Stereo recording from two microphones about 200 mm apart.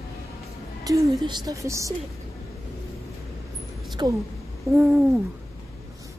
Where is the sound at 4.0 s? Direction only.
20° right (ahead or behind).